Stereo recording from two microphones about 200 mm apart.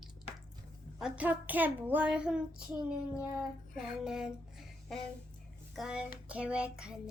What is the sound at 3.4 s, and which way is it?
Music, 5° right (ahead or behind).